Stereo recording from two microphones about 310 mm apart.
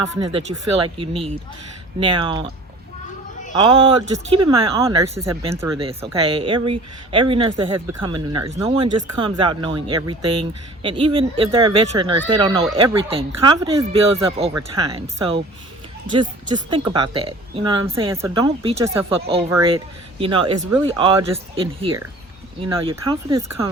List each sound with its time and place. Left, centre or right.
0.2 s speech: centre
3.5 s speech: centre